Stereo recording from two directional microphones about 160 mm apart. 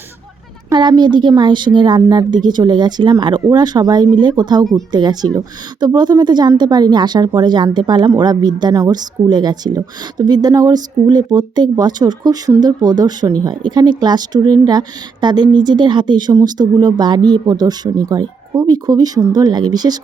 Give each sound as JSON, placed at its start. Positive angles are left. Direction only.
{"t": 0.7, "sound": "speech", "side_deg": -30}